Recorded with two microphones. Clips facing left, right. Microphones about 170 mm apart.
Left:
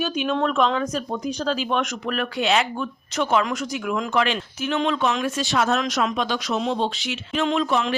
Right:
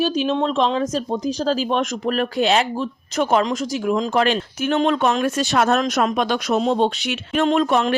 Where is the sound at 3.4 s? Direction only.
30° right (ahead or behind); by 7.9 s 50° right (ahead or behind).